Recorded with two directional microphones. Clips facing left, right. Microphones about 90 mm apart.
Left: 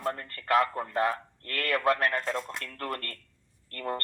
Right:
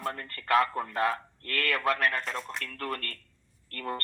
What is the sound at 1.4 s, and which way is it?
Speech, 20° left (ahead or behind).